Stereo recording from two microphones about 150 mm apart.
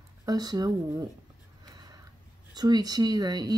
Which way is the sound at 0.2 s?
25° right (ahead or behind).